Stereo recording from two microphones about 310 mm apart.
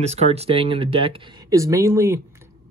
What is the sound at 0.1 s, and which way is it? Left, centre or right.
Speech, centre.